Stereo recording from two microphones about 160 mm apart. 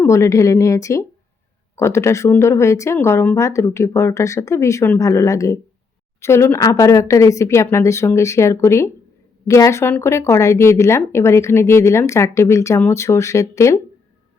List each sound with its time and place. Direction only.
0.0 s a woman's voice: 20° left (ahead or behind)